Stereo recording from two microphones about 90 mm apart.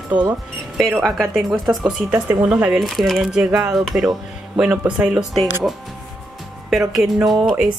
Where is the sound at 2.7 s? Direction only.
Centre (ahead or behind).